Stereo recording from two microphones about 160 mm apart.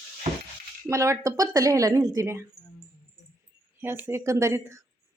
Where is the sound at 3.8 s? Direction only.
15° right (ahead or behind).